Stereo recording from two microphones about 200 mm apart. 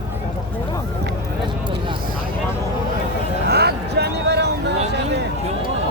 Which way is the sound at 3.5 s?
55° right (ahead or behind).